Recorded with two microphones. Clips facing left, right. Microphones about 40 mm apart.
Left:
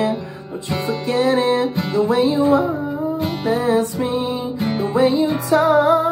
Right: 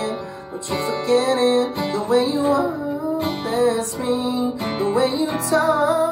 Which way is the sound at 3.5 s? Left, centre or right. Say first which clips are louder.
Left 3 dB; left.